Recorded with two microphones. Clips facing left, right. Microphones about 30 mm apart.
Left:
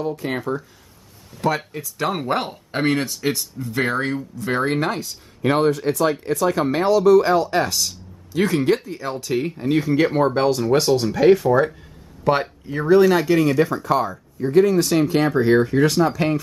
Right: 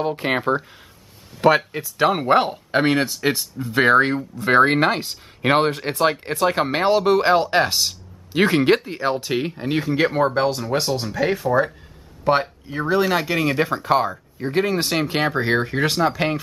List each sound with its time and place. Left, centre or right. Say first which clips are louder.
0.0 s speech: right 3 dB; right
1.3 s a sound: right 6 dB; right
1.8 s speech: right 5 dB; right
9.8 s speech: right 1 dB; centre